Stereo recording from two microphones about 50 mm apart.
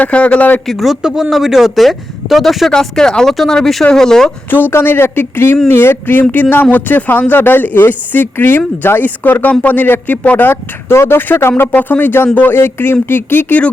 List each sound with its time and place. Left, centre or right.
0.0 s a man's voice: left
0.7 s speech: centre
2.7 s speech: centre
4.7 s speech: left
12.5 s speech: left